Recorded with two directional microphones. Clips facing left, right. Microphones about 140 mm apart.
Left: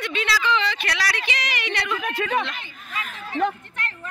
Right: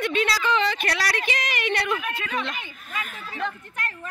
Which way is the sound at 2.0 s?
45° left (ahead or behind).